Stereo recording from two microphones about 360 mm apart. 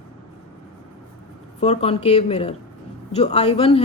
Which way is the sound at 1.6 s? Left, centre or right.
Centre.